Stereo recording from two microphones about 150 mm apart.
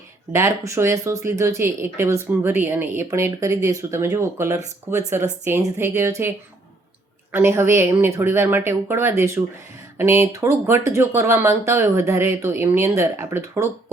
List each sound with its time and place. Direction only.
0.3 s speech: 20° right (ahead or behind)